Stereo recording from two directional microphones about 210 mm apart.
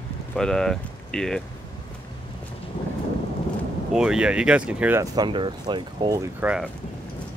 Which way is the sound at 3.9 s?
5° right (ahead or behind).